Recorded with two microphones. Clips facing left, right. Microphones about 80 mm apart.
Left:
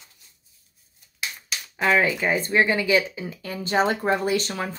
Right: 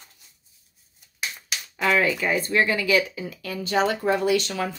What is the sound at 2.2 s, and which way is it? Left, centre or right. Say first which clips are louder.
Speech: left 1 dB; left.